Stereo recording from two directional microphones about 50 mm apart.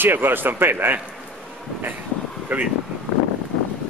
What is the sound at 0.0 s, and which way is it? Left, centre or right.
Speech, right.